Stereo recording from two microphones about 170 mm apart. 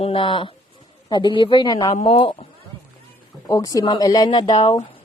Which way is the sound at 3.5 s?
20° left (ahead or behind).